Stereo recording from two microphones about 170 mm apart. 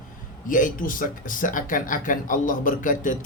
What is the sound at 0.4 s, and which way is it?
Speech, 50° left (ahead or behind).